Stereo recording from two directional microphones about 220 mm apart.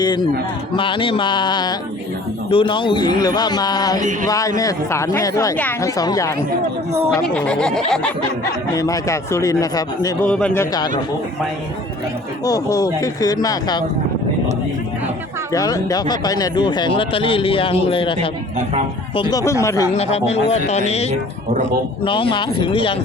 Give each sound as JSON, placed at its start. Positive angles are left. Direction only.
{"t": 0.0, "sound": "speech", "side_deg": 20}
{"t": 7.3, "sound": "speech", "side_deg": 5}
{"t": 8.7, "sound": "speech", "side_deg": 15}
{"t": 10.2, "sound": "speech", "side_deg": 5}
{"t": 12.5, "sound": "speech", "side_deg": 15}
{"t": 15.5, "sound": "speech", "side_deg": 15}
{"t": 19.9, "sound": "speech", "side_deg": 30}